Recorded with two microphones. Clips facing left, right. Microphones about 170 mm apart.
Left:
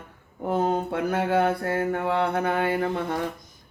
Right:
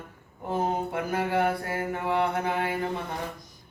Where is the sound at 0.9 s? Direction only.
70° left (ahead or behind).